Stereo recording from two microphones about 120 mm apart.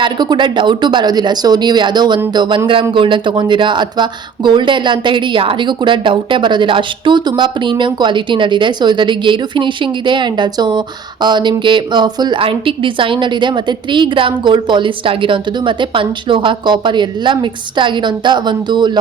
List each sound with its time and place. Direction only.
0.0 s speech: 40° right (ahead or behind)